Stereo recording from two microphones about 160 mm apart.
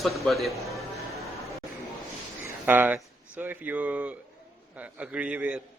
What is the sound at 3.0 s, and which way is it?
Speech, 10° right (ahead or behind).